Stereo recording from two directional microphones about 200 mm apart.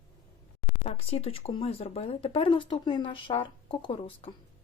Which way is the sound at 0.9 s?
30° left (ahead or behind).